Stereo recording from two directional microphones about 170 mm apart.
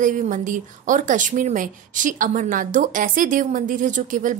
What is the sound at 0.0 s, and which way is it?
A woman's voice, 50° right (ahead or behind).